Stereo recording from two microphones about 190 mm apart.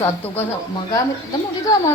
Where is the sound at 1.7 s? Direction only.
20° left (ahead or behind).